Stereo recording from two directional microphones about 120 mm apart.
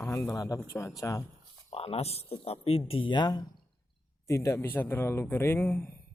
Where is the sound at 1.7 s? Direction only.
55° left (ahead or behind); by 3.4 s 40° left (ahead or behind).